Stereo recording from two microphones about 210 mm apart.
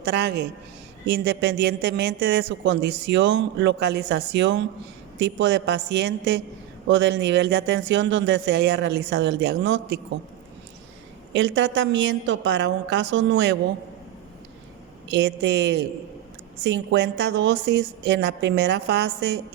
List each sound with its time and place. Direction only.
0.0 s a woman's voice: 55° right (ahead or behind)
11.3 s speech: 60° right (ahead or behind)
15.1 s a woman's voice: 55° right (ahead or behind)